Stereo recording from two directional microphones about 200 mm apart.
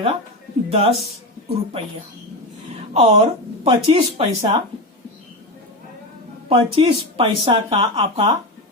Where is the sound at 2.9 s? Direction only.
30° right (ahead or behind).